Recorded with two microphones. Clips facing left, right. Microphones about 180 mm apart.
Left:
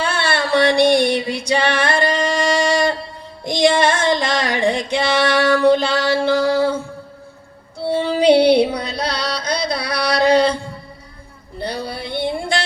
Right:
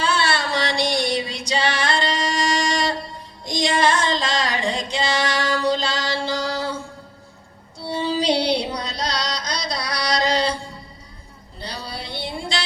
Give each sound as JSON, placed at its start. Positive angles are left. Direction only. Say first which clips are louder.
{"t": 0.0, "sound": "female singing", "louder": "left 2 dB", "side_deg": 55}
{"t": 3.4, "sound": "music", "louder": "left 8 dB", "side_deg": 55}
{"t": 4.1, "sound": "female singing", "louder": "left 4 dB", "side_deg": 55}
{"t": 7.8, "sound": "music", "louder": "left 6 dB", "side_deg": 60}
{"t": 11.6, "sound": "a sound", "louder": "left 7 dB", "side_deg": 55}